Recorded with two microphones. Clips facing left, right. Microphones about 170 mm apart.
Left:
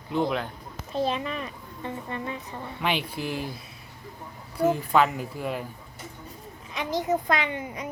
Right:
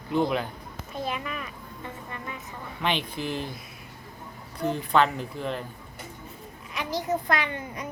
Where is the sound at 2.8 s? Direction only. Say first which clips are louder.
Even; 10° left (ahead or behind).